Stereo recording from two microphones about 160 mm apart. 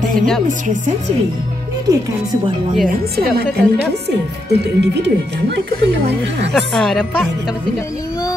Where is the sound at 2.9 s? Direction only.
75° right (ahead or behind).